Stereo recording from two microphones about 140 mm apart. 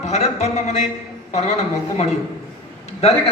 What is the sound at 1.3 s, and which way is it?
Speech, 50° left (ahead or behind).